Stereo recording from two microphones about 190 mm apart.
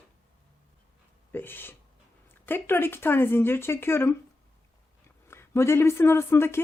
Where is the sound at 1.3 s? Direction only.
10° left (ahead or behind).